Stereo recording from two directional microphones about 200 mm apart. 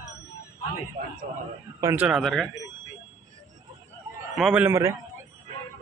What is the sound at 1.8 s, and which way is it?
Speech, 15° right (ahead or behind).